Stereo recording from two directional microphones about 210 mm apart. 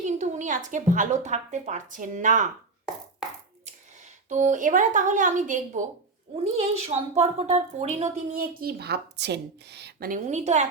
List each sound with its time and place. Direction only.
0.0 s a woman's voice: 35° right (ahead or behind)
4.3 s a woman's voice: 35° right (ahead or behind)